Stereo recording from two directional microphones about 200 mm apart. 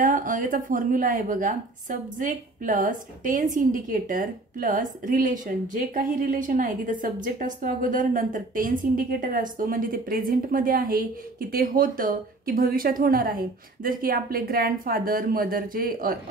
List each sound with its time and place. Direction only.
0.0 s a woman's voice: 45° right (ahead or behind)